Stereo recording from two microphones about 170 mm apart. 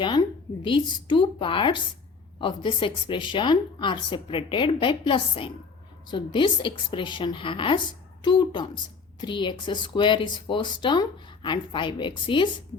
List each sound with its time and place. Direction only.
0.0 s speech: 30° left (ahead or behind)